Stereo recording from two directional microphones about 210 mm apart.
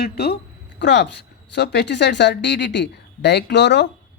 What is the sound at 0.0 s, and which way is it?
Speech, 50° left (ahead or behind).